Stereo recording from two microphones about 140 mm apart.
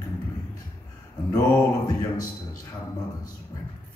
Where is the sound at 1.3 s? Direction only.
30° left (ahead or behind).